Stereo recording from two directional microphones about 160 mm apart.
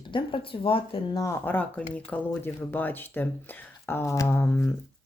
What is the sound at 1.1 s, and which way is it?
Speech, 15° left (ahead or behind).